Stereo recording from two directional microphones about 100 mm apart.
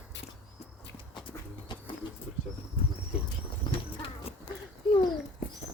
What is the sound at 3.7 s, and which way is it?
Horse, 65° left (ahead or behind).